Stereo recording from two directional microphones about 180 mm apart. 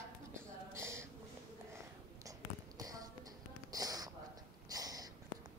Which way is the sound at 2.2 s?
20° right (ahead or behind).